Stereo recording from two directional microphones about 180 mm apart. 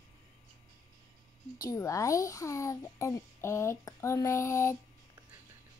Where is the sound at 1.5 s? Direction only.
20° left (ahead or behind).